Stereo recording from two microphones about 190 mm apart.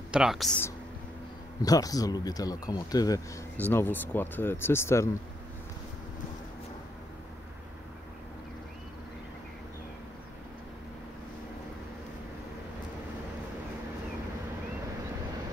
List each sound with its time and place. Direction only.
0.1 s speech: centre (ahead or behind)
1.6 s speech: 20° left (ahead or behind)